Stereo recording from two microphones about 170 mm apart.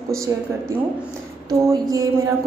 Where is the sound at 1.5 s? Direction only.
20° right (ahead or behind).